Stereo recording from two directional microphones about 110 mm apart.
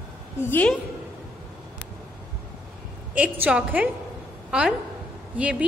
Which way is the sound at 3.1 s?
15° right (ahead or behind).